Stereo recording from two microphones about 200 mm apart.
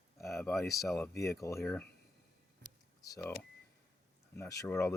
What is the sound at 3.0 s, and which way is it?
Speech, 15° left (ahead or behind).